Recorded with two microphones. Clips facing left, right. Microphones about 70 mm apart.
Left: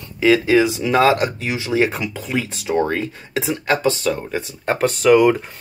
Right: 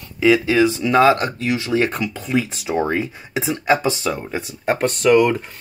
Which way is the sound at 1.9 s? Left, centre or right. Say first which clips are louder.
Right 2 dB; centre.